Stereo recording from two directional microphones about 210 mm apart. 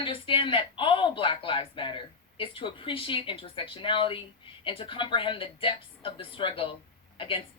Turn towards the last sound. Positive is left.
turn(degrees=25)  # may be behind; listen again after turning